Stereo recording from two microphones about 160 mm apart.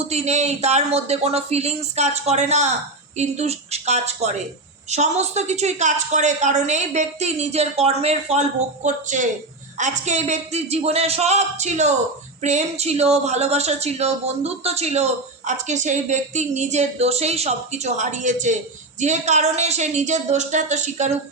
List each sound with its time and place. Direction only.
0.0 s speech: 40° right (ahead or behind)